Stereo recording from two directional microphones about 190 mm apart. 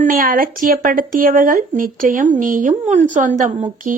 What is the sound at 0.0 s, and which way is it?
A woman's voice, 45° right (ahead or behind).